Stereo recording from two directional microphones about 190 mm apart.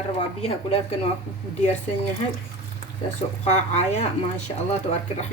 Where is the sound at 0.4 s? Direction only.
30° left (ahead or behind).